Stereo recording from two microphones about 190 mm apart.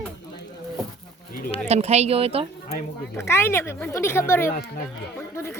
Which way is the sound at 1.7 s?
35° right (ahead or behind).